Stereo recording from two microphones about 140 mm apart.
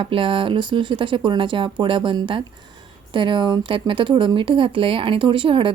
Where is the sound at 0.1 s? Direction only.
40° right (ahead or behind).